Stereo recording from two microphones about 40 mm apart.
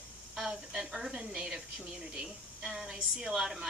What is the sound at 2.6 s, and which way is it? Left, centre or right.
Speech, centre.